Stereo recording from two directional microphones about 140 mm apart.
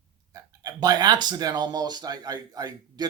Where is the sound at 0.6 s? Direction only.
30° right (ahead or behind).